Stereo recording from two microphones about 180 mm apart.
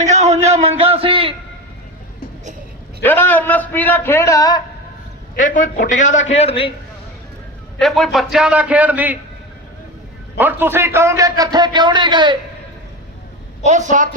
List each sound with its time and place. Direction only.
0.1 s a sound: 40° right (ahead or behind)
3.0 s a man's voice: 10° left (ahead or behind)
5.3 s a man's voice: 45° left (ahead or behind)
7.8 s a man's voice: centre (ahead or behind)
10.3 s a man's voice: 10° right (ahead or behind)
13.9 s speech: 45° right (ahead or behind)